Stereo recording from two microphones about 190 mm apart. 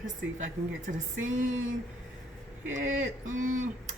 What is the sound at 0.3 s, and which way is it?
Speech, 40° right (ahead or behind).